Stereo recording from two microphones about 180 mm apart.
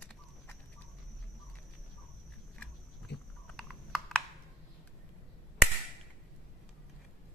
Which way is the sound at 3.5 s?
5° left (ahead or behind).